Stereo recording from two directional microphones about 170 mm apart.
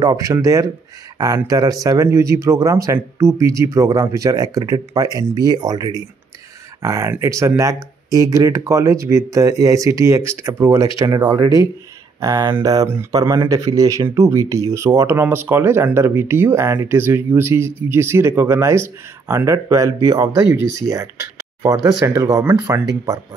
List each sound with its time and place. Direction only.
0.0 s speech: 20° right (ahead or behind)